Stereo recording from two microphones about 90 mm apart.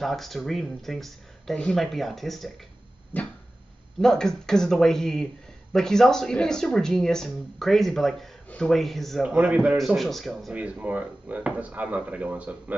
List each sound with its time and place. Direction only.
0.0 s speech: centre (ahead or behind)
3.1 s dog: 20° left (ahead or behind)
4.0 s speech: 5° left (ahead or behind); by 9.8 s 15° right (ahead or behind)
9.8 s speech: centre (ahead or behind)
10.5 s speech: 15° right (ahead or behind)